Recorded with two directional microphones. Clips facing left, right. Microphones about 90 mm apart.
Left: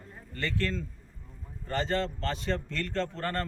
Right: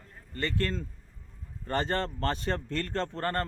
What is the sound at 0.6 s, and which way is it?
Speech, 35° right (ahead or behind).